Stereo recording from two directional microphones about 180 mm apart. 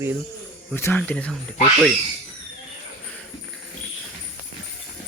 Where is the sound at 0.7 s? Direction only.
10° left (ahead or behind).